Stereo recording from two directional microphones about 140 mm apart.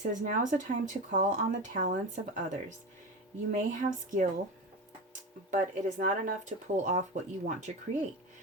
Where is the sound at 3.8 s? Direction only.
65° right (ahead or behind).